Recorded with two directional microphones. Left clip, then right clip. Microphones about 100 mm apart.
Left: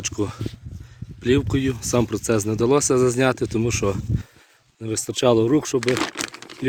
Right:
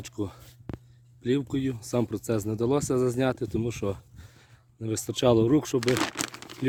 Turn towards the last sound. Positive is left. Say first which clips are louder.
# left 4 dB
turn(degrees=-25)  # may be behind; listen again after turning